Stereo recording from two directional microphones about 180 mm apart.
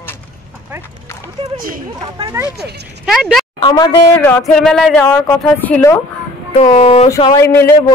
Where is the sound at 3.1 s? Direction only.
Centre (ahead or behind).